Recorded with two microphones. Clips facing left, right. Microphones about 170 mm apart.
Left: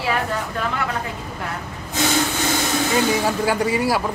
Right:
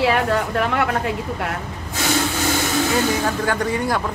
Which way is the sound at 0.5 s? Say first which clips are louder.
Right 5 dB; 65° right (ahead or behind).